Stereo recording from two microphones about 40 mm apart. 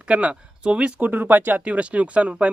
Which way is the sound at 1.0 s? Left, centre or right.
Right.